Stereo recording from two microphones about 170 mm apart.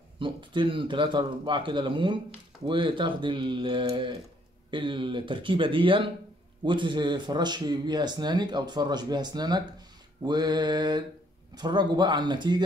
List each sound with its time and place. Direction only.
0.2 s speech: 30° right (ahead or behind)